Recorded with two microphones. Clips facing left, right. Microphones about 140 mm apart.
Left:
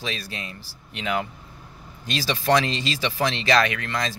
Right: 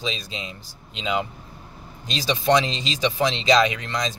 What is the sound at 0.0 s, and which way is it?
Speech, 20° right (ahead or behind).